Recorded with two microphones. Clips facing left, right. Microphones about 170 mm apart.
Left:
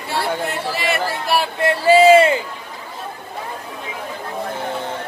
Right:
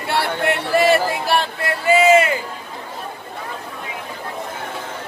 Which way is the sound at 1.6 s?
30° left (ahead or behind).